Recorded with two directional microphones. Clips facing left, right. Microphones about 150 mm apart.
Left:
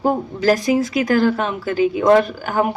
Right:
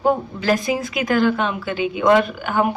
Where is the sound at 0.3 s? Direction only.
40° left (ahead or behind).